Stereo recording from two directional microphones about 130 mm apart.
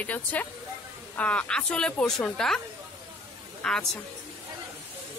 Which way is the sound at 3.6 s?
5° left (ahead or behind).